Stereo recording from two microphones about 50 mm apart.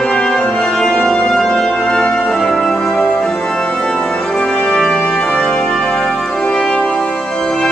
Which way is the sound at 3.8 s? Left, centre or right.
Centre.